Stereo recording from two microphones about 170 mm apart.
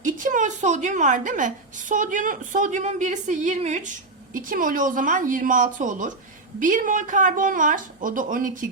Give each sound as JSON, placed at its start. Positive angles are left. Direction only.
{"t": 0.0, "sound": "a woman's voice", "side_deg": -50}
{"t": 4.4, "sound": "a woman's voice", "side_deg": -55}